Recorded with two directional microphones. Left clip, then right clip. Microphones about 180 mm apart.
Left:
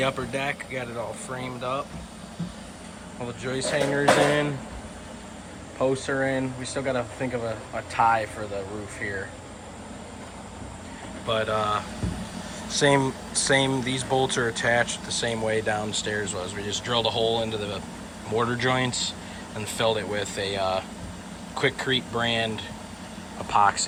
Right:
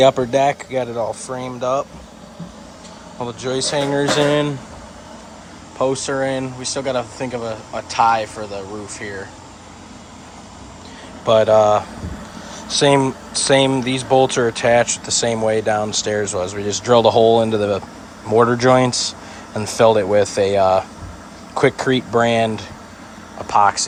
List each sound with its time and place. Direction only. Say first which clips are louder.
0.0 s speech: right 13 dB; 25° right (ahead or behind)
3.2 s speech: right 8 dB; 15° right (ahead or behind)
5.8 s speech: right 6 dB; 15° right (ahead or behind)
11.3 s speech: right 13 dB; 25° right (ahead or behind)
12.8 s speech: right 7 dB; 15° right (ahead or behind)
23.5 s speech: right 6 dB; 5° right (ahead or behind)